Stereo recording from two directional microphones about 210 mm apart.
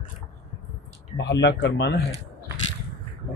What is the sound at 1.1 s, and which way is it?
Speech, 55° left (ahead or behind).